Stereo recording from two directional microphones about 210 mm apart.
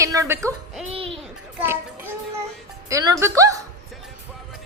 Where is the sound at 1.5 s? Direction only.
10° right (ahead or behind).